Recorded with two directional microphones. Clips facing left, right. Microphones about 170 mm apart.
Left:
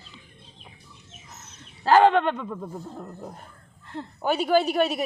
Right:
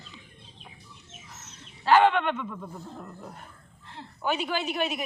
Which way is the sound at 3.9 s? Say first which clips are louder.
Left 4 dB; 45° left (ahead or behind).